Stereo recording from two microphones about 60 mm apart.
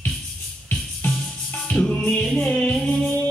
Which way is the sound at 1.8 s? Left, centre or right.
Centre.